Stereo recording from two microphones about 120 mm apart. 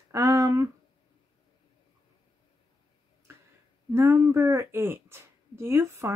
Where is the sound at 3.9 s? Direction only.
20° right (ahead or behind).